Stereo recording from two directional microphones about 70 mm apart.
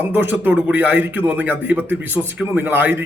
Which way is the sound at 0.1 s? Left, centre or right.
Right.